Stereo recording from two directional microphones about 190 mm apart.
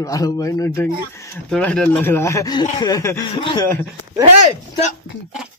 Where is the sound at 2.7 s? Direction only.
20° left (ahead or behind).